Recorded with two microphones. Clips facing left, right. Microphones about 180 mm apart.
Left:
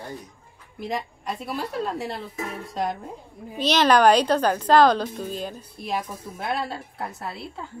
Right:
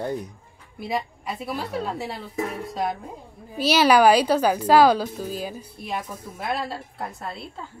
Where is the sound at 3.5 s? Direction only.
5° right (ahead or behind).